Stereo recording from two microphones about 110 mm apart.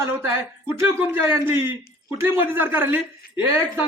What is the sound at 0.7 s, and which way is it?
A man's voice, 20° right (ahead or behind).